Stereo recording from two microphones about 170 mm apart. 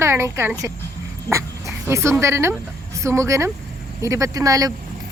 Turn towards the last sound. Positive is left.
turn(degrees=-20)  # may be behind; listen again after turning